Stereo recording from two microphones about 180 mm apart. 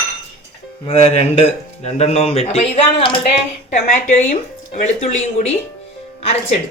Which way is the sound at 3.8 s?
40° left (ahead or behind).